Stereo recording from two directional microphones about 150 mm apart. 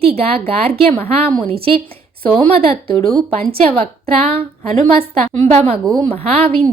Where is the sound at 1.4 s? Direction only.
40° right (ahead or behind).